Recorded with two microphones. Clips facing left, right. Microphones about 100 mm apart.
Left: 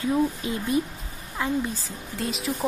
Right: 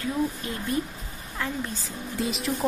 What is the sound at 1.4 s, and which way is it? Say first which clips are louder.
Speech: left 4 dB; 15° left (ahead or behind).